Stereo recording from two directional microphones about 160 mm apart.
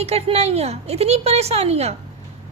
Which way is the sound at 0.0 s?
40° right (ahead or behind).